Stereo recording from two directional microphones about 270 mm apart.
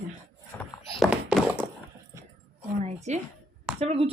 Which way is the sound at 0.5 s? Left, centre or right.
Centre.